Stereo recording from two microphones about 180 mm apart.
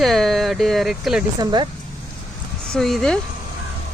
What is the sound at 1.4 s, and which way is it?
Speech, 25° right (ahead or behind).